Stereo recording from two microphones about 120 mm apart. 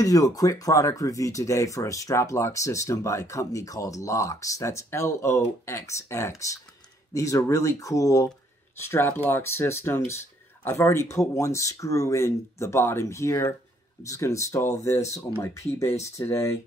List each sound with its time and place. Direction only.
0.0 s speech: 30° left (ahead or behind)